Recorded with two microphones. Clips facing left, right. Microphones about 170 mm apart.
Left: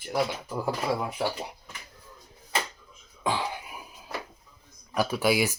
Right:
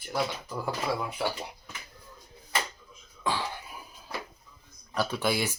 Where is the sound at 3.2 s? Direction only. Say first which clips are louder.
Left 2 dB; 15° left (ahead or behind).